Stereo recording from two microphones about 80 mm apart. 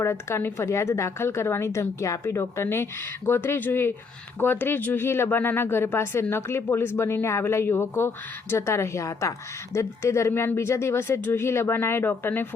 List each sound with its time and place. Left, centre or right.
0.0 s a woman's voice: left